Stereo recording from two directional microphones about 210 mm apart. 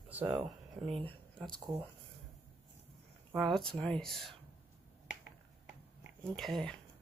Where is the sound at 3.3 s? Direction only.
Centre (ahead or behind).